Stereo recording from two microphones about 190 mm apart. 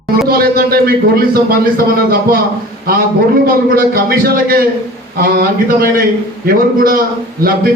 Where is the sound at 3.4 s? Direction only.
50° right (ahead or behind).